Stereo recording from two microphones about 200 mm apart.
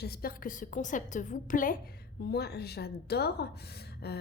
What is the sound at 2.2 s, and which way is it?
A woman's voice, 55° left (ahead or behind).